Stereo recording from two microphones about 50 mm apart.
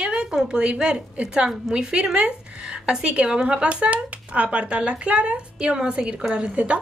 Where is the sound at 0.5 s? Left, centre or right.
Centre.